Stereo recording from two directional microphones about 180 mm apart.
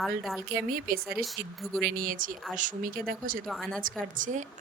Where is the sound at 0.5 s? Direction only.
55° right (ahead or behind).